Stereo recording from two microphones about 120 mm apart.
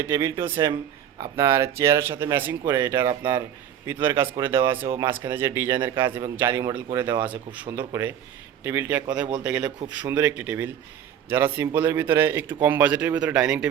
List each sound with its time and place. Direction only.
0.0 s speech: 25° right (ahead or behind); by 13.7 s 5° right (ahead or behind)